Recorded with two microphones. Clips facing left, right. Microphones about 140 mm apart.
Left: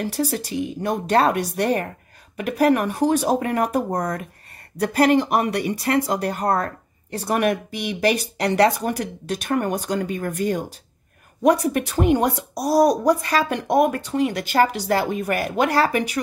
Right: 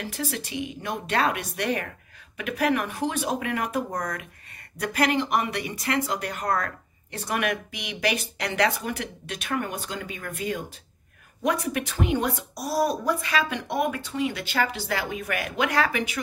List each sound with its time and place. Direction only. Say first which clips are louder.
0.0 s speech: left 8 dB; 40° left (ahead or behind)